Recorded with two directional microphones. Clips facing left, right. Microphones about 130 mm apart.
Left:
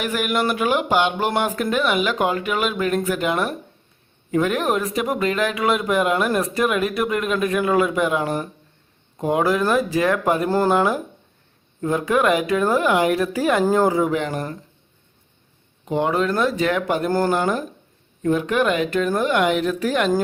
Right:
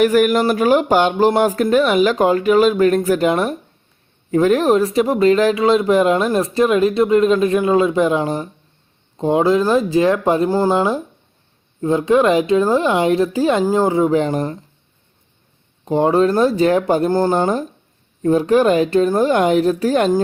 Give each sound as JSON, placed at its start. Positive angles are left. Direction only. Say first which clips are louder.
{"t": 0.0, "sound": "speech", "louder": "right 9 dB", "side_deg": -45}
{"t": 15.8, "sound": "speech", "louder": "right 6 dB", "side_deg": -35}
{"t": 17.1, "sound": "speech", "louder": "right 4 dB", "side_deg": -20}
{"t": 17.3, "sound": "speech", "louder": "right 4 dB", "side_deg": -30}